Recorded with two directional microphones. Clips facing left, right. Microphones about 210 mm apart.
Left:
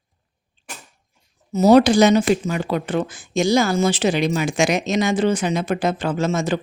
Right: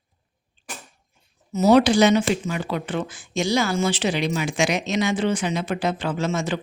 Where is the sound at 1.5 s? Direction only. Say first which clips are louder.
Left 3 dB; 40° left (ahead or behind).